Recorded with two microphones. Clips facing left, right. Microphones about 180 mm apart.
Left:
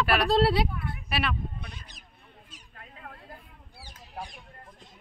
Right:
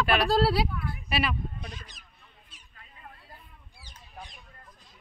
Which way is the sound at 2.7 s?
65° left (ahead or behind).